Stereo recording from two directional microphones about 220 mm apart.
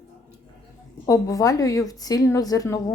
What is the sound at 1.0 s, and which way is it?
A woman's voice, 15° left (ahead or behind).